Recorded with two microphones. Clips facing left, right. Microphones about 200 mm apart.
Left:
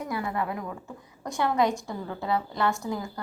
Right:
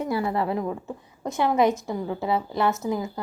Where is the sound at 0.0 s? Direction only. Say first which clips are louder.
Right 5 dB; 30° right (ahead or behind).